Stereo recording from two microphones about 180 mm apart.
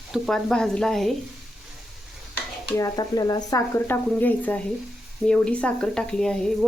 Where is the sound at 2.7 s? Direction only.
20° left (ahead or behind).